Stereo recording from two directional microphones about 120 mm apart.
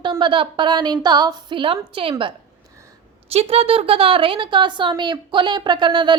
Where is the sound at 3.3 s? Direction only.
55° right (ahead or behind).